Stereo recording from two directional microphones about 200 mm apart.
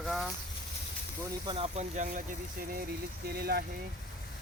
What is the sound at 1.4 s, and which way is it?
Speech, 30° right (ahead or behind).